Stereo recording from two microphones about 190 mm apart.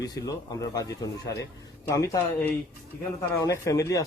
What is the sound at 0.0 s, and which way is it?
Speech, 20° left (ahead or behind).